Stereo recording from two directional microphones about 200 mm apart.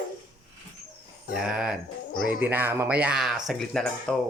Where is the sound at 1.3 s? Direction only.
5° right (ahead or behind).